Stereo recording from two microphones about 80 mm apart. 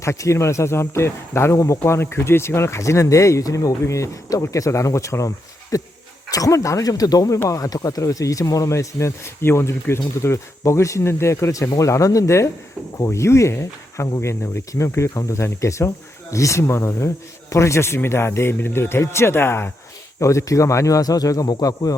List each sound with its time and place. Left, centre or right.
0.0 s speech: left
20.1 s speech: left